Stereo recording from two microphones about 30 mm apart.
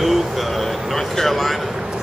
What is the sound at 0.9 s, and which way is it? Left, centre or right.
Speech, centre.